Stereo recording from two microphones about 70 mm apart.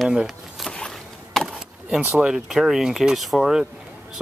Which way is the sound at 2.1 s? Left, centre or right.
Centre.